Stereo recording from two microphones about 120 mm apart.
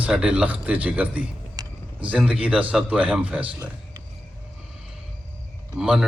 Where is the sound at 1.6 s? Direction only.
30° right (ahead or behind).